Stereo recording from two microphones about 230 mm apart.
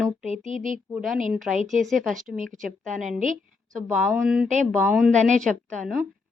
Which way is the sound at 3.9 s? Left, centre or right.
Centre.